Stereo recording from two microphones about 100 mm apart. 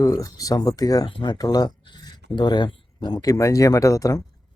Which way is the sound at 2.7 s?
55° left (ahead or behind).